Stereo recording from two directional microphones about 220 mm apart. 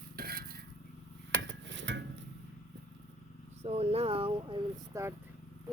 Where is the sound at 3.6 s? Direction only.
30° right (ahead or behind).